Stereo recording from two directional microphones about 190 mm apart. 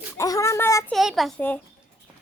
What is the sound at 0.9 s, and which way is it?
Speech, centre (ahead or behind).